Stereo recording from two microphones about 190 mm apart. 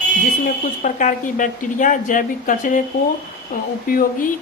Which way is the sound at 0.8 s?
45° left (ahead or behind).